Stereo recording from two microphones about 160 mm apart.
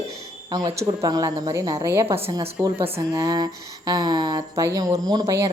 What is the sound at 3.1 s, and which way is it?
Speech, 25° right (ahead or behind).